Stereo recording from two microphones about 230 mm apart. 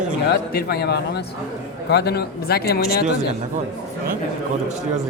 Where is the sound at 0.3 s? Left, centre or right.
Left.